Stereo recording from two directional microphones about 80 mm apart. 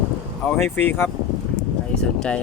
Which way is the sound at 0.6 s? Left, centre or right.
Left.